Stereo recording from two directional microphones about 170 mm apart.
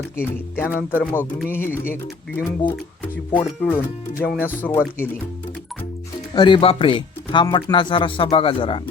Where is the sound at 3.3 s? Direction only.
10° left (ahead or behind).